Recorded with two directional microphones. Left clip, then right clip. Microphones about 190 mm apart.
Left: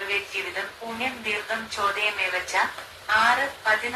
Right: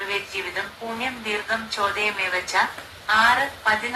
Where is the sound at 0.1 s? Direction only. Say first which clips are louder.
Right 1 dB; 20° right (ahead or behind).